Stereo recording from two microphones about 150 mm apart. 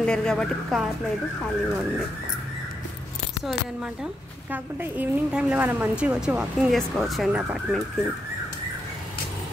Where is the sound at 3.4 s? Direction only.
5° right (ahead or behind).